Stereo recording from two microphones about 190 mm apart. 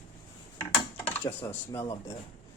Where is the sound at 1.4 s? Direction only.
10° left (ahead or behind).